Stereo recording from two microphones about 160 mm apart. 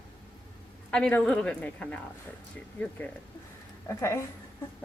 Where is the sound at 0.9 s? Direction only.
5° left (ahead or behind).